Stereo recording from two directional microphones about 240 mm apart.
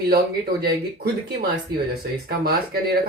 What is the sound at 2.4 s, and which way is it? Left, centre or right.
Speech, right.